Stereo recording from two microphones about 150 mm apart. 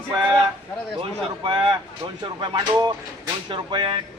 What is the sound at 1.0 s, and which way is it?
Speech, 35° right (ahead or behind).